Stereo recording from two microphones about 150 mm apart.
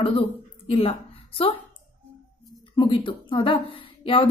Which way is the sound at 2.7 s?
30° left (ahead or behind).